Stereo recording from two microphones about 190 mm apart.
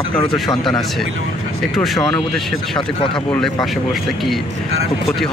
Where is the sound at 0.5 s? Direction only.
20° left (ahead or behind).